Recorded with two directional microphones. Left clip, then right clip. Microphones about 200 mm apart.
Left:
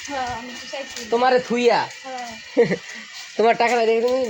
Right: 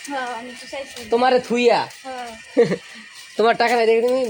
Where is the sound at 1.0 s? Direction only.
20° right (ahead or behind).